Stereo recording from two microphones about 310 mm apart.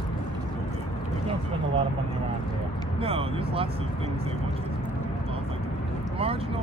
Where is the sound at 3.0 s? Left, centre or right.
Centre.